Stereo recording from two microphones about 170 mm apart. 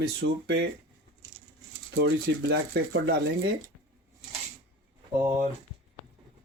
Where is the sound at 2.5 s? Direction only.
90° right.